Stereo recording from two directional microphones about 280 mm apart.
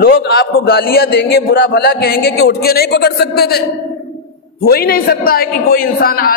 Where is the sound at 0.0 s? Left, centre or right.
Left.